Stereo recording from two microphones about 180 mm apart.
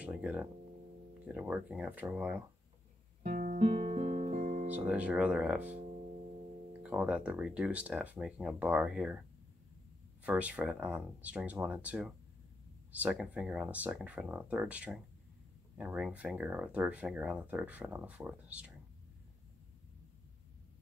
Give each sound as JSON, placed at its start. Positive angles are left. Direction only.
{"t": 0.0, "sound": "a sound", "side_deg": -5}
{"t": 1.2, "sound": "speech", "side_deg": -5}
{"t": 3.3, "sound": "music", "side_deg": -45}
{"t": 4.7, "sound": "speech", "side_deg": -10}
{"t": 6.8, "sound": "speech", "side_deg": -5}
{"t": 10.2, "sound": "speech", "side_deg": -10}